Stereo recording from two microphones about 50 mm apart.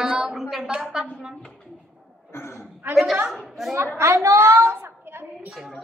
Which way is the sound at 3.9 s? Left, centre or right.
Right.